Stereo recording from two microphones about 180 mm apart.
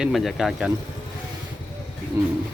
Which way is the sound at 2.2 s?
15° right (ahead or behind).